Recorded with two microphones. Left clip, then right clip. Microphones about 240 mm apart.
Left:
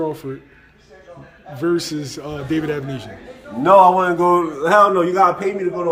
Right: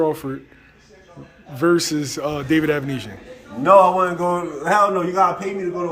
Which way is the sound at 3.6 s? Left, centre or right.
Left.